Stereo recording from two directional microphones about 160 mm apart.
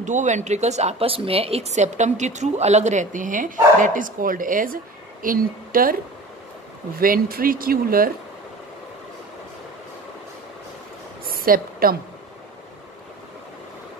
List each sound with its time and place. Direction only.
0.0 s speech: 50° right (ahead or behind)
7.0 s speech: 65° right (ahead or behind)
11.2 s a sound: 65° right (ahead or behind)